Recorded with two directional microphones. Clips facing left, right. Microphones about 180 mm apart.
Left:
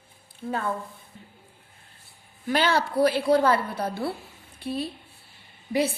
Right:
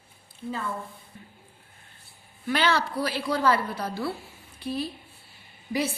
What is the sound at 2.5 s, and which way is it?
A woman's voice, 50° left (ahead or behind).